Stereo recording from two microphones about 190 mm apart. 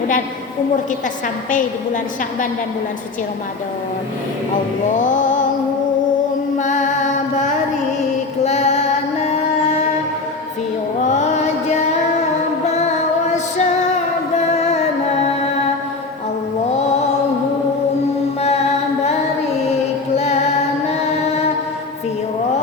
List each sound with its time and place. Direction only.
4.9 s music: 40° left (ahead or behind)
6.6 s music: 40° left (ahead or behind)
12.6 s music: 35° left (ahead or behind)